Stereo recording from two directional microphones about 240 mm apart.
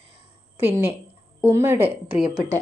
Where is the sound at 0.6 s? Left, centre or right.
Centre.